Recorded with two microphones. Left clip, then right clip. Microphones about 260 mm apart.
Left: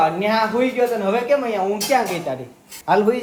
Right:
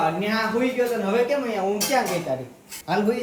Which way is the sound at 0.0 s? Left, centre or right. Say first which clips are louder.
Left 5 dB; centre.